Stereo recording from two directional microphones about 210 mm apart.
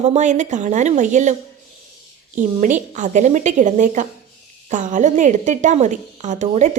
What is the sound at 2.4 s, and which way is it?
A woman's voice, 35° right (ahead or behind).